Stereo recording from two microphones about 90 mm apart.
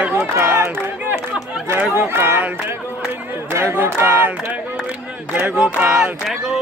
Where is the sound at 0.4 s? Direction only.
30° right (ahead or behind).